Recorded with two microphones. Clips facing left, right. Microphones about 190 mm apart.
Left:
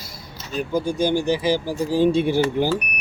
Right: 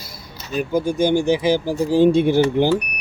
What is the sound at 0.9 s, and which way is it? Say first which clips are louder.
Speech: right 4 dB; 25° right (ahead or behind).